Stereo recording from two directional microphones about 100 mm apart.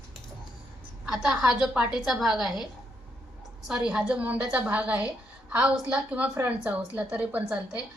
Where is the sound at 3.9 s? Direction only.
10° right (ahead or behind).